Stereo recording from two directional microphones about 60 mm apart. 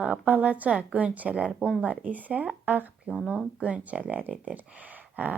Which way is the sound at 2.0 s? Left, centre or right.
Right.